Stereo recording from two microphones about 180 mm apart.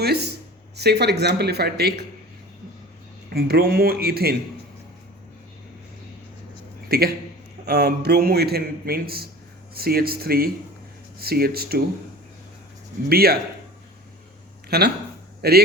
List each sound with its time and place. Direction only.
0.0 s a man's voice: 65° right (ahead or behind)
3.3 s a man's voice: 55° right (ahead or behind)
6.8 s a man's voice: 60° right (ahead or behind)
13.1 s a man's voice: 60° right (ahead or behind)
14.7 s a man's voice: 60° right (ahead or behind)